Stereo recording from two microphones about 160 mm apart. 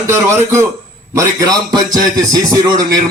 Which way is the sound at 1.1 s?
25° right (ahead or behind).